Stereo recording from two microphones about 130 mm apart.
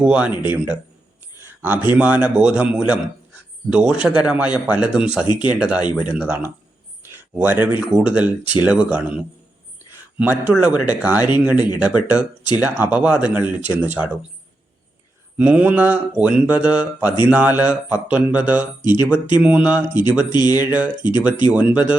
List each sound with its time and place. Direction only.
0.0 s speech: 10° right (ahead or behind)
1.4 s a sound: 15° right (ahead or behind)
1.9 s speech: 10° right (ahead or behind)
5.2 s speech: 35° left (ahead or behind)
5.5 s speech: 10° right (ahead or behind)
10.5 s speech: 10° right (ahead or behind)
15.4 s speech: 10° right (ahead or behind)
20.3 s speech: 30° left (ahead or behind)
20.6 s speech: 10° right (ahead or behind)